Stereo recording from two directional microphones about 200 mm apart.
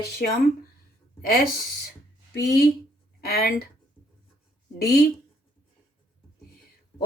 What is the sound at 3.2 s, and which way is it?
Speech, 50° left (ahead or behind).